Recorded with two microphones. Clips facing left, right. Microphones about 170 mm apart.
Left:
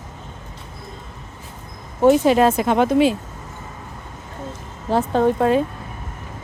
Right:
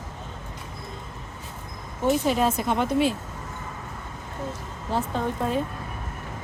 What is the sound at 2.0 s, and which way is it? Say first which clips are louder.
Speech: left 8 dB; 90° left.